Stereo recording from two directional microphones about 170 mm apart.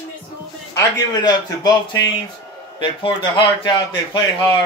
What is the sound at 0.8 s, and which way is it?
A man's voice, 20° left (ahead or behind).